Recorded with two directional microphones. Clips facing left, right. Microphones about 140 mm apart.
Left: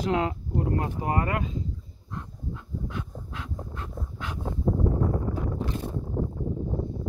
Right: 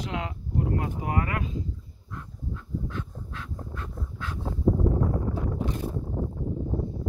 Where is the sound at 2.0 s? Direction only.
20° left (ahead or behind).